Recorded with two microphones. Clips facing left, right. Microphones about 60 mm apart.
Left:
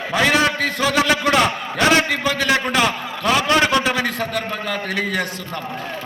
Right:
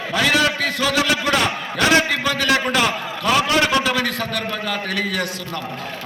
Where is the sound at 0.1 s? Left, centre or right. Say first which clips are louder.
Left 1 dB; left.